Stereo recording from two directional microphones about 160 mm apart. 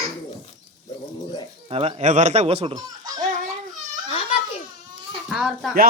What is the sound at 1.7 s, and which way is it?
Speech, 40° right (ahead or behind).